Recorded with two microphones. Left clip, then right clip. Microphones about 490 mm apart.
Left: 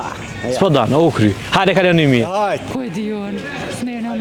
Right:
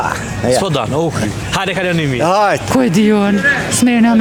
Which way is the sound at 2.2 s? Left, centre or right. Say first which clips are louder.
Right 6 dB; right.